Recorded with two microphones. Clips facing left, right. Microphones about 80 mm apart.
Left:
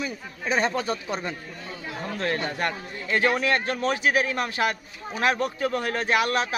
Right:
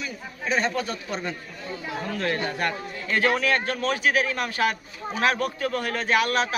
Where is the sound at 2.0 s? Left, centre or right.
Left.